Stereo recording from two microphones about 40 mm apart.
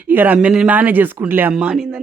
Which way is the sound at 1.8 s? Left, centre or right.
Centre.